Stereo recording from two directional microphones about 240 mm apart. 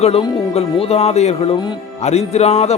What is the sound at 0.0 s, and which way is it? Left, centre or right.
Speech, left.